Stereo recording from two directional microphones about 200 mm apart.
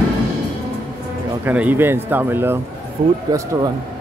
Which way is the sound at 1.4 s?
10° right (ahead or behind).